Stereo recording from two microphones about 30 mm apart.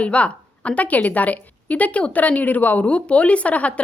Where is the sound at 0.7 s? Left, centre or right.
Left.